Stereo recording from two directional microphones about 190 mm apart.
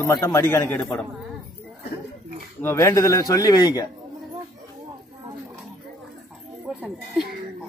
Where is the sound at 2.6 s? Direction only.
15° left (ahead or behind).